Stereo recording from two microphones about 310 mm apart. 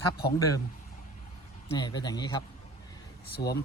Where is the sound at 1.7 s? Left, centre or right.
Centre.